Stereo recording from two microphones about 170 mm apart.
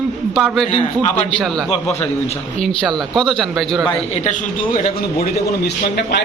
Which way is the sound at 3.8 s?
40° left (ahead or behind).